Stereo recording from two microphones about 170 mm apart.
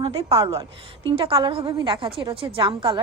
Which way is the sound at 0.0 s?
35° right (ahead or behind).